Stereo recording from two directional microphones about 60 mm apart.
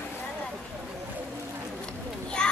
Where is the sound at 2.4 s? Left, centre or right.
Centre.